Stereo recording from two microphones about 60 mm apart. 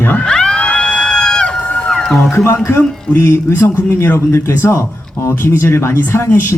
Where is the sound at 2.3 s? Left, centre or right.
Left.